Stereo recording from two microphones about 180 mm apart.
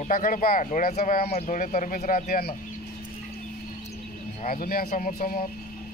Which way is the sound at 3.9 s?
50° left (ahead or behind).